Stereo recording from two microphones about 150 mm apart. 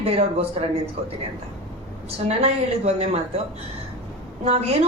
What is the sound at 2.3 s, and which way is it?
Speech, 45° right (ahead or behind).